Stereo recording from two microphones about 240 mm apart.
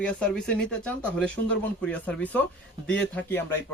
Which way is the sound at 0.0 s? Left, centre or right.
Centre.